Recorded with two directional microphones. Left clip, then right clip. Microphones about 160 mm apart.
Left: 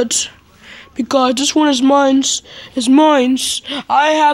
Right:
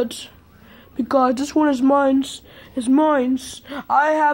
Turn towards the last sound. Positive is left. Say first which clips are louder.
# left 5 dB
turn(degrees=25)  # may be behind; listen again after turning